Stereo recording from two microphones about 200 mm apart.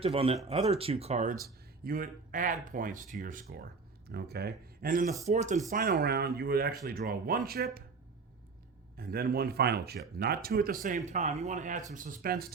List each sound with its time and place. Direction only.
0.0 s speech: 30° right (ahead or behind)
4.1 s speech: 55° right (ahead or behind); by 5.6 s 35° right (ahead or behind)
5.7 s speech: 50° right (ahead or behind)
9.0 s speech: 50° right (ahead or behind)